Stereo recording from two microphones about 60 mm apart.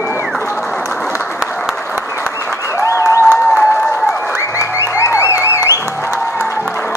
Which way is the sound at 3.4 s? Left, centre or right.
Left.